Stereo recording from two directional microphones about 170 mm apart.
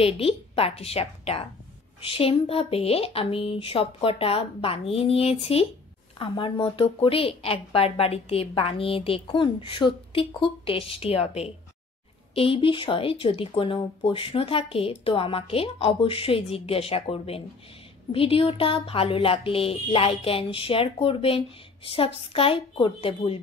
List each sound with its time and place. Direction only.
0.0 s a woman's voice: 35° left (ahead or behind)